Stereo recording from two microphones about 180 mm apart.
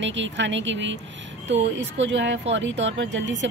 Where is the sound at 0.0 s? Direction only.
90° right.